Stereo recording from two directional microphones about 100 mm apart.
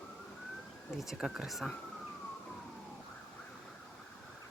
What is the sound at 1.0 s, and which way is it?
Speech, 5° right (ahead or behind).